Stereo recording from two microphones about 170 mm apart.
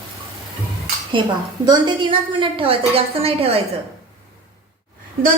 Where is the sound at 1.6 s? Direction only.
25° right (ahead or behind).